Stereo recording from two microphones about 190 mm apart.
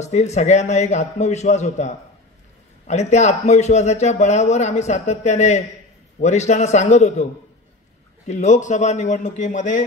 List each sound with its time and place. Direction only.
0.0 s a man's voice: 35° left (ahead or behind)
8.3 s a man's voice: 35° left (ahead or behind)